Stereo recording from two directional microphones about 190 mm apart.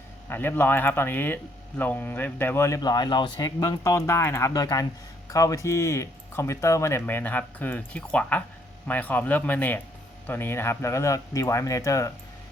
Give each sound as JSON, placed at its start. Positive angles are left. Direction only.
{"t": 0.3, "sound": "speech", "side_deg": 10}